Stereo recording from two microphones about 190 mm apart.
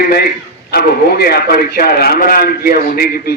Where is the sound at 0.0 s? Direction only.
50° left (ahead or behind).